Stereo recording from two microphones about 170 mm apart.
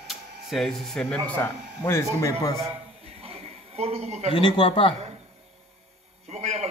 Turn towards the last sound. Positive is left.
turn(degrees=-40)  # may be behind; listen again after turning